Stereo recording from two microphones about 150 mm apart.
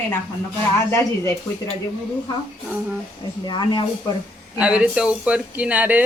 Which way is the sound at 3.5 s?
30° left (ahead or behind).